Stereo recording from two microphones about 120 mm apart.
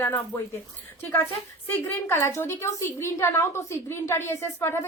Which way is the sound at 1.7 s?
20° left (ahead or behind).